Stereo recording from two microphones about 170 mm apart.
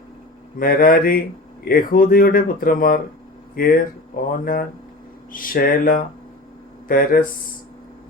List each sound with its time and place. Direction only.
0.6 s speech: 55° left (ahead or behind)
5.3 s speech: 55° left (ahead or behind)